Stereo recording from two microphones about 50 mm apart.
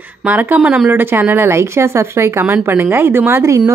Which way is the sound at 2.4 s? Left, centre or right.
Right.